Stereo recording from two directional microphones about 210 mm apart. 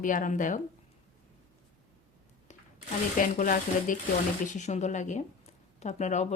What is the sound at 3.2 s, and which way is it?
Speech, 40° left (ahead or behind).